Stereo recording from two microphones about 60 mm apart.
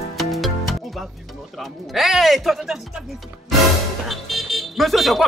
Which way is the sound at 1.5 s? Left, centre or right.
Centre.